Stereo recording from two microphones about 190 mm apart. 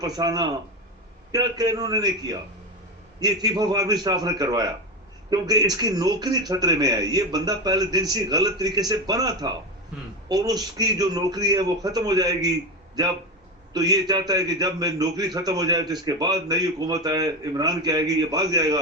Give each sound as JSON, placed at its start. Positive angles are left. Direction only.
{"t": 0.0, "sound": "a man's voice", "side_deg": -20}
{"t": 13.7, "sound": "a man's voice", "side_deg": -20}